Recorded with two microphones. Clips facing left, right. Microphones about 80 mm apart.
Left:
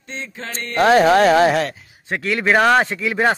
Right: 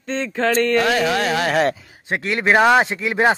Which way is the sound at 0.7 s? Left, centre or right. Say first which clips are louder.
Left 5 dB; left.